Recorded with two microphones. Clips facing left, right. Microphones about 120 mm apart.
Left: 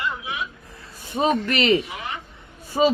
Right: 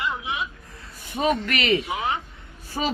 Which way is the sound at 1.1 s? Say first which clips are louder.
Left 2 dB; 30° left (ahead or behind).